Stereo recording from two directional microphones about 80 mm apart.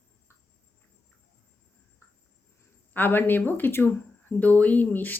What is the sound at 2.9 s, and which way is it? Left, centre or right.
Speech, left.